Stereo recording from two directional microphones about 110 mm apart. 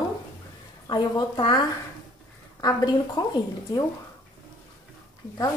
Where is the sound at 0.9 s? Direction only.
40° left (ahead or behind).